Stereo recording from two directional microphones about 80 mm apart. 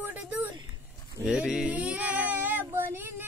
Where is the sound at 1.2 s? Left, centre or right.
Centre.